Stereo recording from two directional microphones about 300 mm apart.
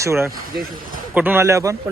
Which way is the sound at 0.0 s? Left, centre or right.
Centre.